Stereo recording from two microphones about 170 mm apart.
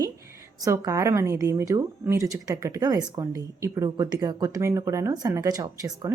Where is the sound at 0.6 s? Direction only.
20° right (ahead or behind).